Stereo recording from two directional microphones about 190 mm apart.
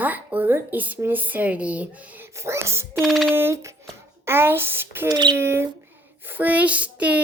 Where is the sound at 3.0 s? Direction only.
Centre (ahead or behind).